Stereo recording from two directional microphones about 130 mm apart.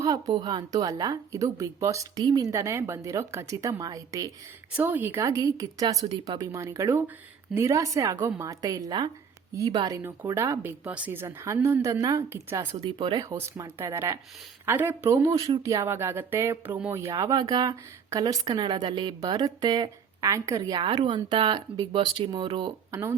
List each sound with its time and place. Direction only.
0.0 s a woman's voice: 30° right (ahead or behind)
4.8 s a woman's voice: 15° right (ahead or behind)
12.8 s speech: 40° right (ahead or behind)
13.7 s a woman's voice: 20° right (ahead or behind)
16.9 s speech: 25° right (ahead or behind); by 22.7 s 40° right (ahead or behind)
22.9 s speech: 20° right (ahead or behind)